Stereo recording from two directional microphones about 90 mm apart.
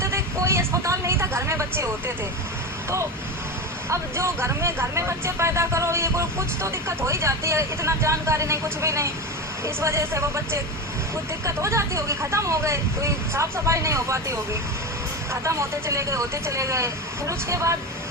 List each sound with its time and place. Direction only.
0.0 s vehicle: 30° right (ahead or behind)
3.8 s speech: 30° right (ahead or behind)